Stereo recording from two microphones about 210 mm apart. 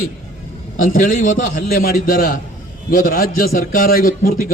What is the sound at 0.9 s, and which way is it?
A man's voice, 40° left (ahead or behind).